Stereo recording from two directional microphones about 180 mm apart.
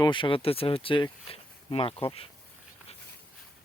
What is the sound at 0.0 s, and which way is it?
Speech, 25° left (ahead or behind).